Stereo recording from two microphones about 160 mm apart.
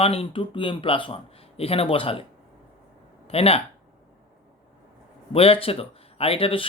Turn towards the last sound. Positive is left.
turn(degrees=35)  # may be behind; listen again after turning